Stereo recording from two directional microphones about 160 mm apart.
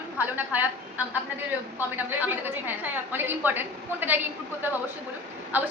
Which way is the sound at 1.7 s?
10° right (ahead or behind).